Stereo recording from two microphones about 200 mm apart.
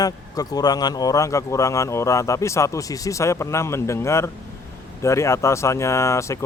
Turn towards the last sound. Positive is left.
turn(degrees=15)  # may be behind; listen again after turning